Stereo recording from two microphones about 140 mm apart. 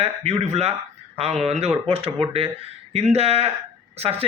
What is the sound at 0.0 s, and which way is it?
A man's voice, 45° right (ahead or behind).